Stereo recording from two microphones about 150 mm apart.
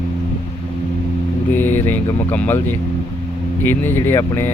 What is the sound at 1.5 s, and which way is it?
Mantra, 15° left (ahead or behind).